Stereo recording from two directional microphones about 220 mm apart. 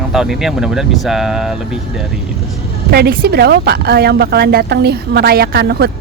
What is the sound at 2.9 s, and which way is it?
A woman's voice, 45° right (ahead or behind).